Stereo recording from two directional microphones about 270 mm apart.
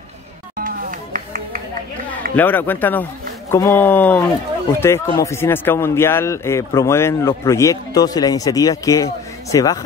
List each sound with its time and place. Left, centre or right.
0.6 s music: right
2.3 s a man's voice: centre